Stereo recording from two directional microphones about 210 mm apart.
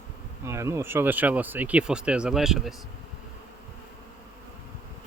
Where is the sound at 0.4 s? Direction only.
15° right (ahead or behind).